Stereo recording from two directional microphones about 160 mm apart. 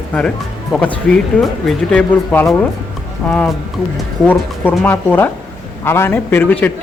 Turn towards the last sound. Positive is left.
turn(degrees=10)  # may be behind; listen again after turning